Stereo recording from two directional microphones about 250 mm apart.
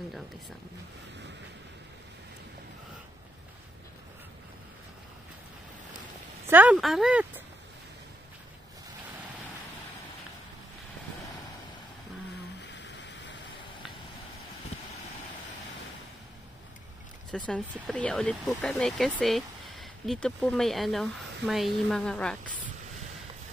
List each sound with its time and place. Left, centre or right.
6.4 s speech: centre
12.7 s rain: left
17.5 s speech: centre